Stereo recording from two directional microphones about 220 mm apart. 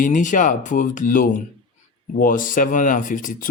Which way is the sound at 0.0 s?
35° left (ahead or behind).